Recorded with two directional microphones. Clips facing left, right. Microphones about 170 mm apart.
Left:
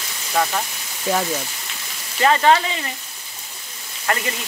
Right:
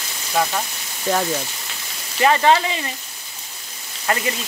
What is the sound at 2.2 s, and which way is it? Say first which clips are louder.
Speech: even; 20° right (ahead or behind).